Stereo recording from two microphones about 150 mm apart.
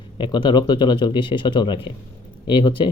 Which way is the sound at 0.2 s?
30° left (ahead or behind).